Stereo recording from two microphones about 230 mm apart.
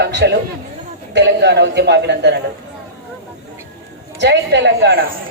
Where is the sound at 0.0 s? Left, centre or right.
Right.